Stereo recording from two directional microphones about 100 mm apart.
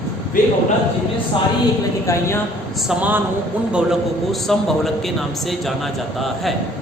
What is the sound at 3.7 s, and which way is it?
A man's voice, 5° right (ahead or behind).